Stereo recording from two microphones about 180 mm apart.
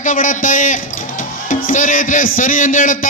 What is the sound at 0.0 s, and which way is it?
A man's voice, 45° left (ahead or behind).